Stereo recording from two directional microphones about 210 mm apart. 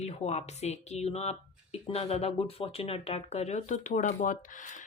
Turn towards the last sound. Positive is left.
turn(degrees=40)  # may be behind; listen again after turning